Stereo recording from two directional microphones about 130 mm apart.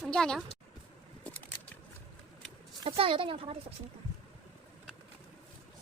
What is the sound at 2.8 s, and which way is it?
Speech, 45° right (ahead or behind).